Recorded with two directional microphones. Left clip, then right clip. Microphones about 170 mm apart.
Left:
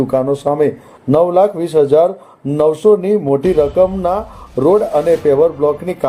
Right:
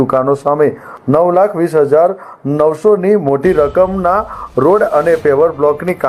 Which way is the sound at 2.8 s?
15° right (ahead or behind).